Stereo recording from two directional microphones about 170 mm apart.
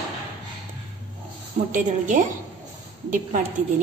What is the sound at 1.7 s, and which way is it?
A woman's voice, 45° right (ahead or behind).